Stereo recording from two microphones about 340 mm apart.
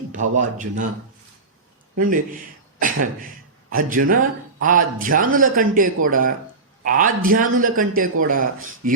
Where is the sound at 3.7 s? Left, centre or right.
Right.